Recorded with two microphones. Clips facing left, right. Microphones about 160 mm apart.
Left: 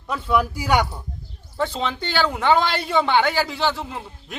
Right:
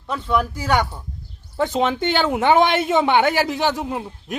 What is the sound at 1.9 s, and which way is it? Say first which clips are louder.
A man's voice: right 4 dB; 20° right (ahead or behind).